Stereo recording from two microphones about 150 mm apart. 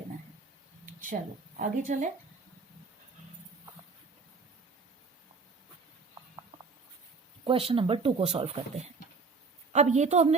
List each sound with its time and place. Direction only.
1.5 s a woman's voice: 60° right (ahead or behind)
7.4 s a woman's voice: 40° right (ahead or behind)